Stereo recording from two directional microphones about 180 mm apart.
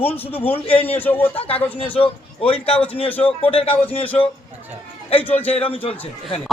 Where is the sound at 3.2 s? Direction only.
30° left (ahead or behind).